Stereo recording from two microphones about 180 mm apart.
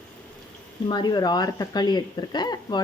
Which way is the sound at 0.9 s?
25° left (ahead or behind).